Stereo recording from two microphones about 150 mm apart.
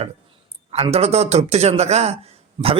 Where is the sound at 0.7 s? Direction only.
40° right (ahead or behind).